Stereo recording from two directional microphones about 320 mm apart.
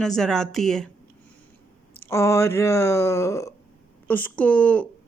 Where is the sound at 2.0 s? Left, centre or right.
Centre.